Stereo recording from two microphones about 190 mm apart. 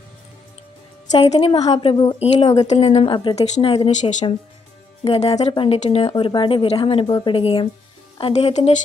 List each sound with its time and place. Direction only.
1.2 s a woman's voice: 35° left (ahead or behind)